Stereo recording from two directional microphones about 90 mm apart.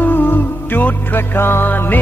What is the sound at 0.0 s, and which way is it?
Music, 20° left (ahead or behind).